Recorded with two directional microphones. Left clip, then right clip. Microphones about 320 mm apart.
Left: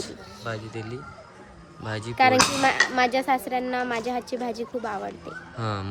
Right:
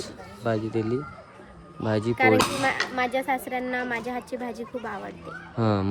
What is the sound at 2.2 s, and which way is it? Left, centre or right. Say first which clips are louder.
Speech: left 3 dB; centre.